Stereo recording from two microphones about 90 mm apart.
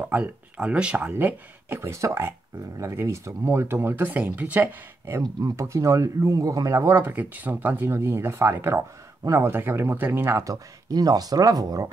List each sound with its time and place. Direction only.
0.0 s speech: 15° right (ahead or behind)
1.1 s speech: 25° right (ahead or behind)
5.2 s speech: 35° right (ahead or behind)